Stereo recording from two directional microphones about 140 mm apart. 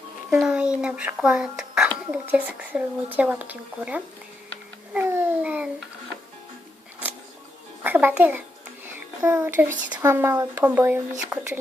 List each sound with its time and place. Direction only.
0.3 s a child's voice: 5° right (ahead or behind)
4.9 s babbling: 15° right (ahead or behind)
7.9 s a child's voice: 15° right (ahead or behind)